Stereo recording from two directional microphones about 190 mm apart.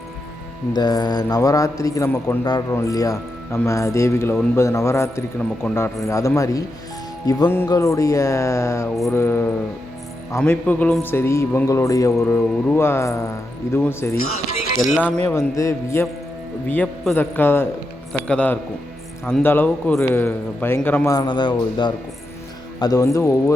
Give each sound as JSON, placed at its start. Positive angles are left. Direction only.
{"t": 0.7, "sound": "a man's voice", "side_deg": 20}